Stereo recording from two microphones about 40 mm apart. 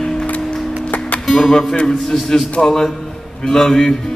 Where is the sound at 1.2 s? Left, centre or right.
Centre.